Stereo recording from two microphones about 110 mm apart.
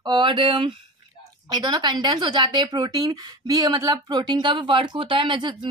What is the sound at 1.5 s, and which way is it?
Speech, 40° right (ahead or behind).